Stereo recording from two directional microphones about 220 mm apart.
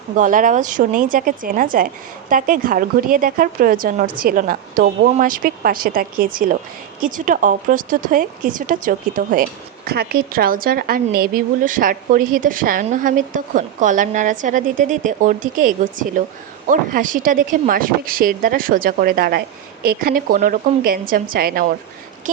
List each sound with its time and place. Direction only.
0.2 s speech: 35° right (ahead or behind)